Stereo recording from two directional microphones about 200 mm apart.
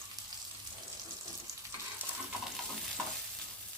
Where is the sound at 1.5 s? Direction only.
15° right (ahead or behind).